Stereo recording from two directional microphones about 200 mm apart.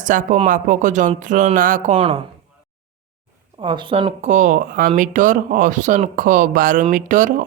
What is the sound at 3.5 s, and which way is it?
Speech, 25° right (ahead or behind).